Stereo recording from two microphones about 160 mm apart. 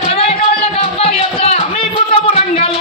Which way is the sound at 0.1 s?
40° left (ahead or behind).